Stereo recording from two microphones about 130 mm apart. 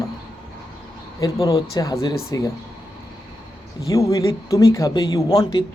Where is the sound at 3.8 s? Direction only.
30° left (ahead or behind).